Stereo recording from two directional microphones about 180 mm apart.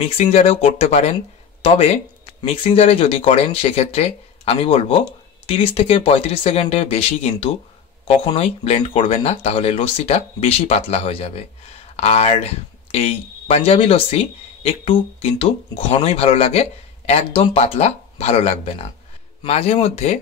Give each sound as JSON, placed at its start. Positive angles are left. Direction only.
{"t": 0.0, "sound": "speech", "side_deg": 35}